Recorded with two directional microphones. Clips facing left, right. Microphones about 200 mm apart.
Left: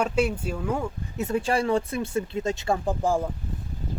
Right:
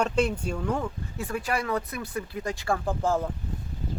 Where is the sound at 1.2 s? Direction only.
25° left (ahead or behind).